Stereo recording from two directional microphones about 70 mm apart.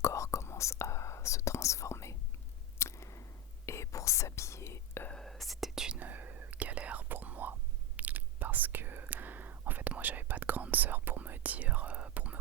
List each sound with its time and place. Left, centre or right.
0.0 s whispering: left
2.7 s a sound: left
3.7 s whispering: left
5.2 s whispering: centre
6.0 s whispering: right